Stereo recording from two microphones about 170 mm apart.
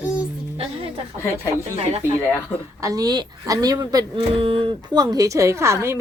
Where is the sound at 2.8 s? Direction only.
20° right (ahead or behind).